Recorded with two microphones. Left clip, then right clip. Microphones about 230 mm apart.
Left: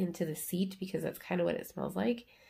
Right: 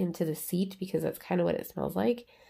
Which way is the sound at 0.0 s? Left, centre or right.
Right.